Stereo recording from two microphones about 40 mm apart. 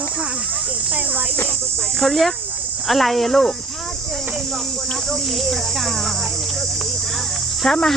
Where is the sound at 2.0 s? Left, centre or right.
Centre.